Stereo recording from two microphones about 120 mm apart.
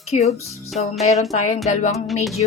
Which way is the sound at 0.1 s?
65° left (ahead or behind).